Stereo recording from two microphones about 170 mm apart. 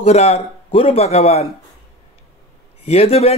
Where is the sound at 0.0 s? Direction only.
40° left (ahead or behind).